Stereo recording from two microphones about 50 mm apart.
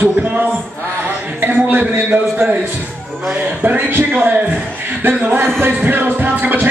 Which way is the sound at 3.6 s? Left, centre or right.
Right.